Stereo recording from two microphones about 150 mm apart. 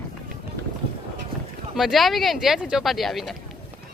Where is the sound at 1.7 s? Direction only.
Centre (ahead or behind).